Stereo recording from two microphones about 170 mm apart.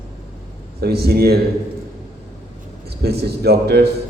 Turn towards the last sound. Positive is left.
turn(degrees=-70)  # may be behind; listen again after turning